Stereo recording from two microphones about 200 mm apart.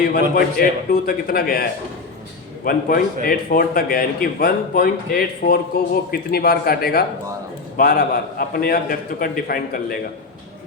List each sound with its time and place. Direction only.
0.1 s a man's voice: 50° left (ahead or behind)
2.6 s a man's voice: 50° left (ahead or behind)